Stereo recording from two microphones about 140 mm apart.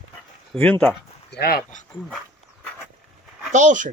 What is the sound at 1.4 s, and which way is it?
Speech, 90° left.